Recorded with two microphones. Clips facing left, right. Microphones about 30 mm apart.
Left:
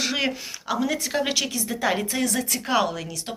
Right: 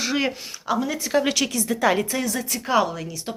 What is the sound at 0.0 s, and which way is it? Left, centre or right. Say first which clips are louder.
Speech: right 1 dB; left.